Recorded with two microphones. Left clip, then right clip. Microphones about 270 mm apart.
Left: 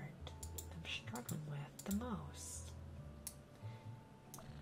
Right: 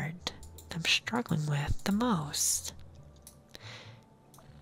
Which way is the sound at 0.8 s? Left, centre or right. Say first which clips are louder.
Right 18 dB; right.